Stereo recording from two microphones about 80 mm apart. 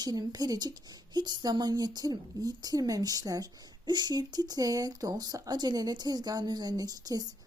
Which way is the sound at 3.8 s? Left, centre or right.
Right.